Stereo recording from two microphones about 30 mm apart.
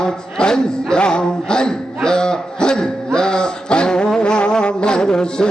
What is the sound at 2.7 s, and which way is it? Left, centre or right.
Music, left.